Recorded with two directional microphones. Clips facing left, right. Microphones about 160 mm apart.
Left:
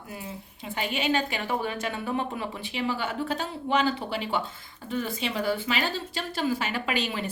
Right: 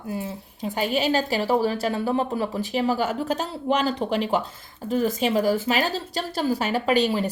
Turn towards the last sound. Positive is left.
turn(degrees=-40)  # may be behind; listen again after turning